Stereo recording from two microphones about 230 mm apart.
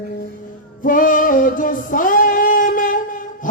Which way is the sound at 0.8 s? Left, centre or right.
Left.